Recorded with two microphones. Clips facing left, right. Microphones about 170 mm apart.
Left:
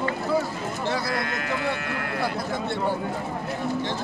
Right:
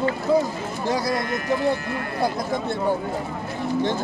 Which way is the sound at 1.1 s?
70° left (ahead or behind).